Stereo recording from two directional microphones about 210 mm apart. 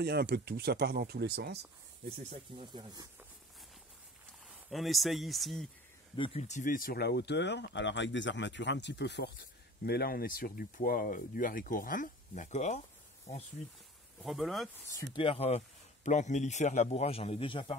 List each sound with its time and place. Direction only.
0.0 s speech: 50° right (ahead or behind)
2.5 s speech: 20° right (ahead or behind)
4.5 s speech: centre (ahead or behind)
6.1 s speech: 25° left (ahead or behind)
14.2 s speech: centre (ahead or behind)
14.9 s speech: 15° left (ahead or behind)
15.2 s speech: 30° left (ahead or behind)